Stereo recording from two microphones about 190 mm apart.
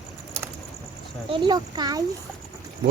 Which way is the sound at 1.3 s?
25° right (ahead or behind).